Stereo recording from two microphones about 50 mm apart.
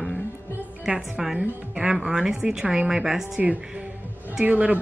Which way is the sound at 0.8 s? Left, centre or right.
Centre.